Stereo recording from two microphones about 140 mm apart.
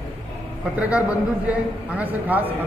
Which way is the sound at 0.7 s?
10° right (ahead or behind).